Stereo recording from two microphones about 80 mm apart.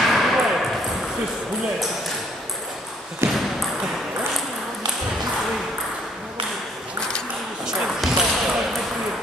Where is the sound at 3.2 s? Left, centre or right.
Right.